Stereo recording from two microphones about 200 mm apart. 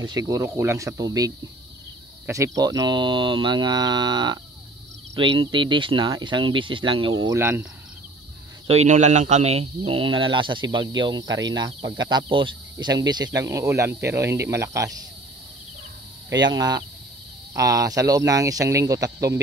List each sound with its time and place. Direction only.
0.0 s speech: 15° right (ahead or behind)
7.3 s speech: 10° right (ahead or behind)
8.6 s speech: 35° right (ahead or behind); by 15.0 s 15° right (ahead or behind)
16.4 s speech: 20° right (ahead or behind)